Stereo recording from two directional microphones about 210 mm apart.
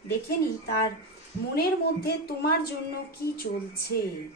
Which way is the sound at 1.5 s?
50° left (ahead or behind).